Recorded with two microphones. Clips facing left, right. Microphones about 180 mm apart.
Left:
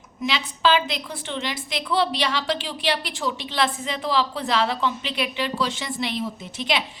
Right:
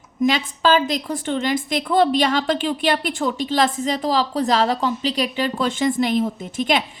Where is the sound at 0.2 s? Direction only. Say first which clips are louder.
Right 5 dB; 45° right (ahead or behind).